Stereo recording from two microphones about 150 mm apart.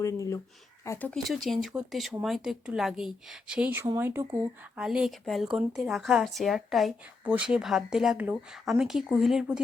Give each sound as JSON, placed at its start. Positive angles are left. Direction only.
{"t": 0.0, "sound": "speech", "side_deg": 20}
{"t": 1.1, "sound": "speech", "side_deg": 0}
{"t": 4.8, "sound": "speech", "side_deg": -5}